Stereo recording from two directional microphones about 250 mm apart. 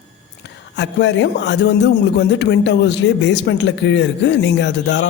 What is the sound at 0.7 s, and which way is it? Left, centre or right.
A man's voice, left.